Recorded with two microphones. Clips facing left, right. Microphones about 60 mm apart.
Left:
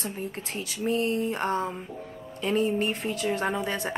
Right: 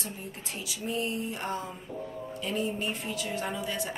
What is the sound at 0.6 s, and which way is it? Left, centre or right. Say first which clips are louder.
Speech: left 6 dB; left.